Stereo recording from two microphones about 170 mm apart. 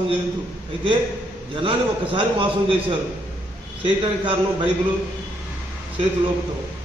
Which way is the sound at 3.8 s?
30° right (ahead or behind).